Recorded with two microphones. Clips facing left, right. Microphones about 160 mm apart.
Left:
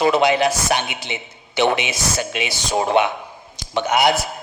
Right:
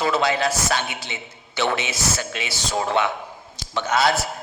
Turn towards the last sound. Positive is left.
turn(degrees=15)  # may be behind; listen again after turning